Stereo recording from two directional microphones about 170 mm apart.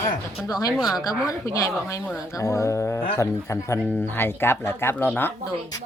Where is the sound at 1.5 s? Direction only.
20° left (ahead or behind).